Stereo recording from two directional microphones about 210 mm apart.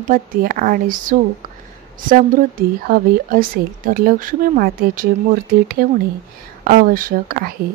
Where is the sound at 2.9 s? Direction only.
40° right (ahead or behind).